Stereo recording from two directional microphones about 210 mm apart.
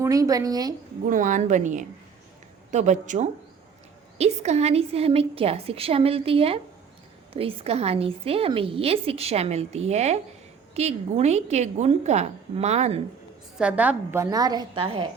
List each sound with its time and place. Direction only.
0.0 s a woman's voice: 15° right (ahead or behind)
1.1 s a woman's voice: 35° right (ahead or behind)
13.6 s a woman's voice: 5° right (ahead or behind); by 15.0 s 25° right (ahead or behind)